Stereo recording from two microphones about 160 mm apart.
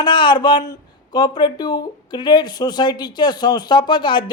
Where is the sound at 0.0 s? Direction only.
30° left (ahead or behind).